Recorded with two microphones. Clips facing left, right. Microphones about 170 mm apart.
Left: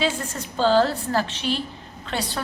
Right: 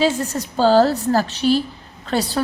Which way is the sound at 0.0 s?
40° right (ahead or behind).